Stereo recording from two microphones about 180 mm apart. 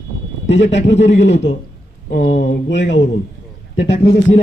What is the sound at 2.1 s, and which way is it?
Speech, 45° left (ahead or behind).